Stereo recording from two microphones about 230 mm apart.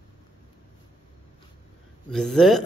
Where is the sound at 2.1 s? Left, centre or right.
Centre.